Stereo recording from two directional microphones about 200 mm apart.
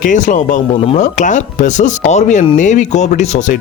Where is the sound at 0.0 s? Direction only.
40° left (ahead or behind).